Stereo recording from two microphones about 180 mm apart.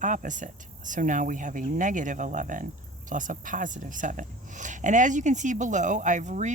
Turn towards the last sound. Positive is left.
turn(degrees=-40)  # may be behind; listen again after turning